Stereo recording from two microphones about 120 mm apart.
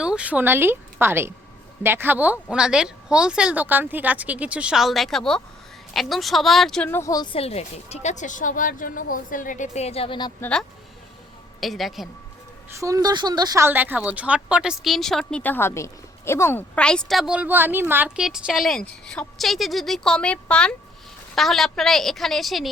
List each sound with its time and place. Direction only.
0.0 s a woman's voice: 10° right (ahead or behind)
6.8 s speech: 20° left (ahead or behind)
7.3 s a woman's voice: 60° left (ahead or behind)
10.4 s a woman's voice: 5° left (ahead or behind)
12.8 s speech: 30° right (ahead or behind)
13.6 s a woman's voice: 15° right (ahead or behind)
18.2 s a woman's voice: 5° right (ahead or behind)